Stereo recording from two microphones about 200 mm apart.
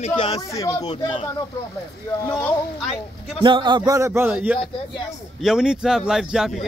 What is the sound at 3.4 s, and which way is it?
Speech, 25° right (ahead or behind).